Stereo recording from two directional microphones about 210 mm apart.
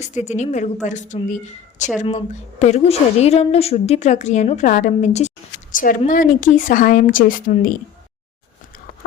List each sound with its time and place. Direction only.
0.0 s a woman's voice: 35° left (ahead or behind)